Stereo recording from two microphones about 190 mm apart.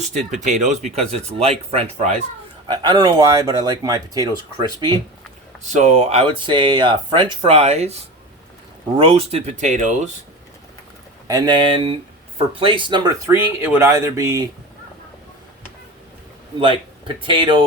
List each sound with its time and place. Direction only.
0.0 s speech: 40° right (ahead or behind)
2.6 s speech: 20° right (ahead or behind)
5.6 s speech: 35° right (ahead or behind)
11.3 s speech: 20° right (ahead or behind)
16.6 s speech: 25° right (ahead or behind)